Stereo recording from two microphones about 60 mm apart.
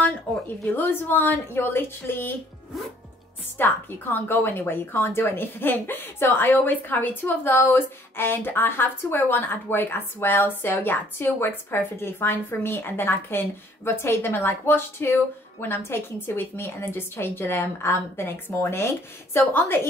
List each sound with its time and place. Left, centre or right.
0.7 s a woman's voice: left
3.5 s a woman's voice: left